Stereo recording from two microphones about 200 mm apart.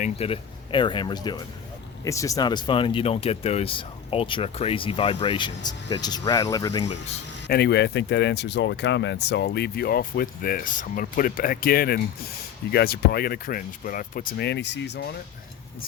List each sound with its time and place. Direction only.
0.0 s speech: 30° left (ahead or behind)
7.4 s speech: 55° left (ahead or behind)